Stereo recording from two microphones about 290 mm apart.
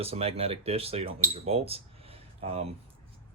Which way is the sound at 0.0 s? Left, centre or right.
Centre.